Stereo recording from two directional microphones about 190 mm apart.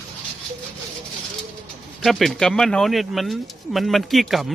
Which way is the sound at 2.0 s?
Centre (ahead or behind).